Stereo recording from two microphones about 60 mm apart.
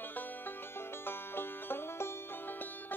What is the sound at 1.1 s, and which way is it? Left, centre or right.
Music, left.